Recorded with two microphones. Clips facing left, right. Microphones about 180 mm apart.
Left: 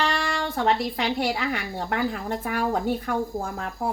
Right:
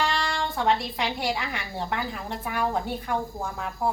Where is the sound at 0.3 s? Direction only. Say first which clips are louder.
Left 1 dB; 65° left (ahead or behind).